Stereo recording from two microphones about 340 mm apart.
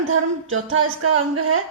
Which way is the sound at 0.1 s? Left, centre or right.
Right.